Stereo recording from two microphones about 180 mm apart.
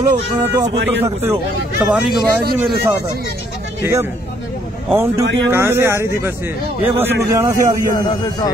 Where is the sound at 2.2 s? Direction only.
60° right (ahead or behind).